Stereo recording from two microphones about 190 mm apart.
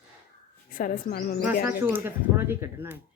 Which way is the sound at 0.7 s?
50° left (ahead or behind).